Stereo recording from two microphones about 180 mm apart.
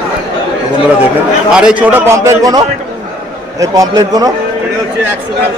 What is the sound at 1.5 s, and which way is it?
A man's voice, 5° right (ahead or behind).